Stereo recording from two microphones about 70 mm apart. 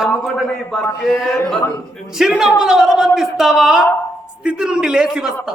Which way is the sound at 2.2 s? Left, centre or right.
Centre.